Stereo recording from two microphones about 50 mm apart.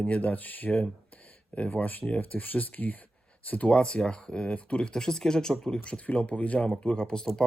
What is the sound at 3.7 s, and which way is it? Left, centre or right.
Speech, centre.